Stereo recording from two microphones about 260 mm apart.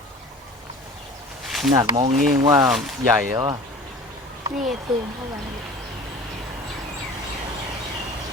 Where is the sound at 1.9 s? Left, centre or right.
Right.